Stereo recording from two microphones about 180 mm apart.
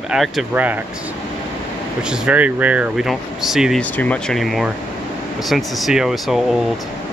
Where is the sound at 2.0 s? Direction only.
5° right (ahead or behind).